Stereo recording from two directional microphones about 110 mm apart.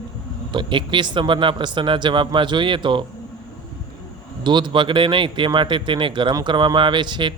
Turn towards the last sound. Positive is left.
turn(degrees=-45)  # may be behind; listen again after turning